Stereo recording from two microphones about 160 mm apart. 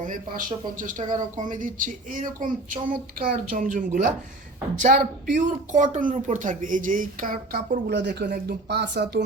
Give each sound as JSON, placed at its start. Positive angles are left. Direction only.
{"t": 0.0, "sound": "speech", "side_deg": -55}